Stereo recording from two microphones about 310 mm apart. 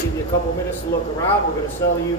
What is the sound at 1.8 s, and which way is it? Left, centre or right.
Speech, centre.